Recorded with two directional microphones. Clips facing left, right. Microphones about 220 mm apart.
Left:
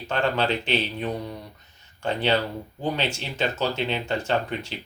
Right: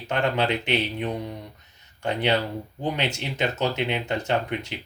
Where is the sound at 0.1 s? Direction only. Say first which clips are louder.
Even; 20° right (ahead or behind).